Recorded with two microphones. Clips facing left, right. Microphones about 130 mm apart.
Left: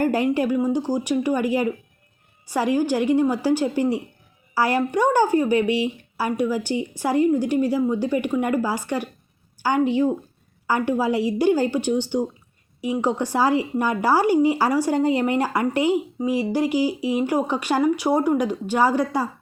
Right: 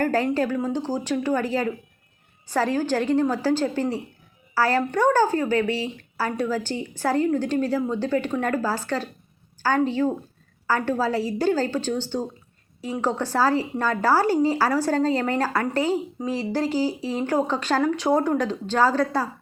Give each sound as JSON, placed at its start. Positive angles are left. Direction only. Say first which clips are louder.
{"t": 0.0, "sound": "speech", "louder": "left 2 dB", "side_deg": 15}